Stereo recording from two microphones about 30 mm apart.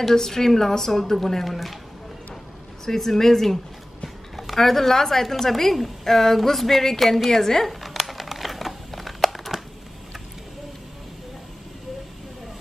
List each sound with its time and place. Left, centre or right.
0.1 s a woman's voice: centre
2.8 s a woman's voice: centre
4.6 s a woman's voice: centre
7.6 s a sound: centre
8.1 s crumpling: centre